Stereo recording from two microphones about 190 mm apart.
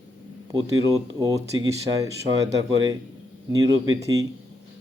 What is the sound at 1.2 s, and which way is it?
Speech, 15° right (ahead or behind).